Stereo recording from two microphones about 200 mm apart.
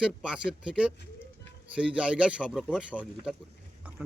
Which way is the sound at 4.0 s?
5° right (ahead or behind).